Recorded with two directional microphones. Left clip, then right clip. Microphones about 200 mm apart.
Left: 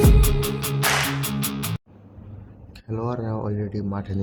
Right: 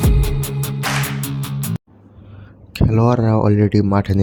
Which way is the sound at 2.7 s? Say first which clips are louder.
Right 12 dB; 40° right (ahead or behind).